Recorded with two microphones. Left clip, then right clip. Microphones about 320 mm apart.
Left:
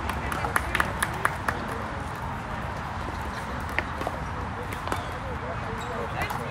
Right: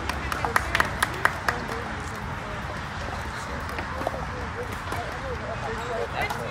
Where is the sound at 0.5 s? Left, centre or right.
Right.